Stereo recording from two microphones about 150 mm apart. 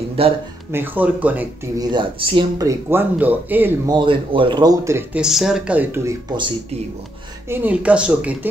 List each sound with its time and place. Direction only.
0.2 s speech: 40° right (ahead or behind)
0.7 s speech: 10° right (ahead or behind)
1.8 s speech: 30° right (ahead or behind)
2.7 s speech: 15° right (ahead or behind)
4.0 s speech: 35° right (ahead or behind)
5.1 s speech: 5° right (ahead or behind)
7.4 s speech: 15° right (ahead or behind)